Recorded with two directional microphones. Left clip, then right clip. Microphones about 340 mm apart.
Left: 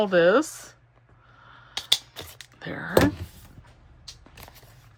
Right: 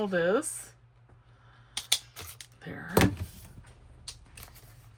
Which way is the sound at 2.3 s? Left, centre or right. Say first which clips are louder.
Left 10 dB; centre.